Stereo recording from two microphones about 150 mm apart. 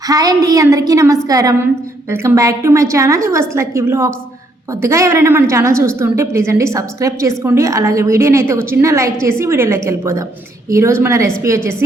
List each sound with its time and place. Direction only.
0.1 s a woman's voice: 25° right (ahead or behind)